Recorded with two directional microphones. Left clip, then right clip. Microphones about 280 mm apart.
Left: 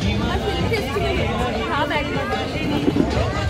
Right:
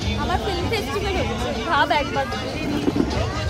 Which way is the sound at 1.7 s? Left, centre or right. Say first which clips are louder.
Right 5 dB; right.